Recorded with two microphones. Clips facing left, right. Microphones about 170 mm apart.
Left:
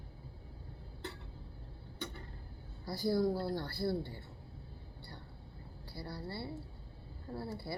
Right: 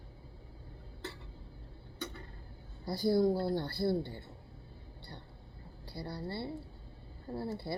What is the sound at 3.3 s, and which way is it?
Speech, centre (ahead or behind).